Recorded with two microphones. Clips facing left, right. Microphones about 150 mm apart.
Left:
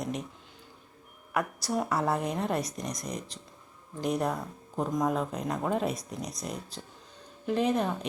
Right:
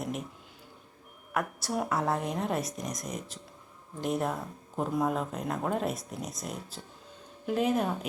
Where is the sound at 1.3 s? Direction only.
Centre (ahead or behind).